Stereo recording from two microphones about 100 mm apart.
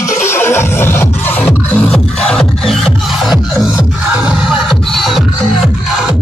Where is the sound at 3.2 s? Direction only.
5° right (ahead or behind).